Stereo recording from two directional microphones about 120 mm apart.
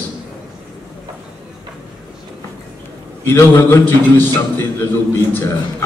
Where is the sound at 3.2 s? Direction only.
20° left (ahead or behind).